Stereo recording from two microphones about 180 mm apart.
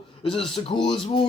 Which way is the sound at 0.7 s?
25° left (ahead or behind).